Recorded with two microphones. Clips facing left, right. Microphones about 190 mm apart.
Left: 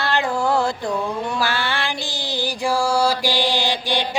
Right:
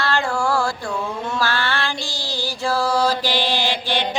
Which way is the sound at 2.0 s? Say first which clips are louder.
Left 2 dB; 20° left (ahead or behind).